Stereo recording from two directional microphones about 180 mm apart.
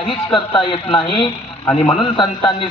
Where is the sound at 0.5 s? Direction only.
25° left (ahead or behind).